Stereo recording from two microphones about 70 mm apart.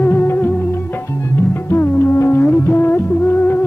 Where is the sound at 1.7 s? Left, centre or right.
Left.